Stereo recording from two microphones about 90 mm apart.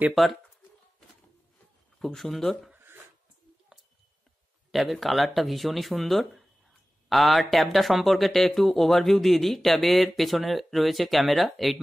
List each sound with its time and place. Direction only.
0.1 s speech: centre (ahead or behind)
2.0 s speech: 5° left (ahead or behind)
2.7 s a sound: 20° right (ahead or behind)
4.6 s speech: centre (ahead or behind)